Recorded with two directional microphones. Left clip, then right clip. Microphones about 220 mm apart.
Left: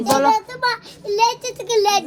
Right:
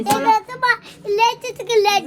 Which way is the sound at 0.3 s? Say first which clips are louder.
Right 2 dB; 10° right (ahead or behind).